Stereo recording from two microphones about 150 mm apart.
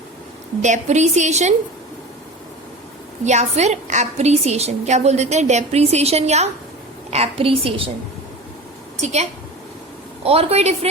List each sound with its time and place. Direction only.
0.6 s a woman's voice: 50° right (ahead or behind)
3.2 s a woman's voice: 50° right (ahead or behind)
10.2 s a woman's voice: 45° right (ahead or behind)